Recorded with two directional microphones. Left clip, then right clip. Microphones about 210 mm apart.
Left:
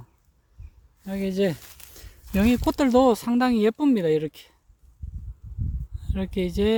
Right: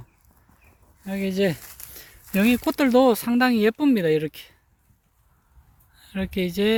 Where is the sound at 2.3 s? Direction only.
10° left (ahead or behind).